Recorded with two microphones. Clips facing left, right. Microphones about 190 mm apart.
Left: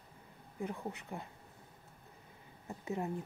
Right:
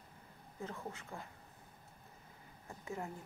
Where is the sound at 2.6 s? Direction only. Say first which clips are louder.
Left 6 dB; 20° left (ahead or behind).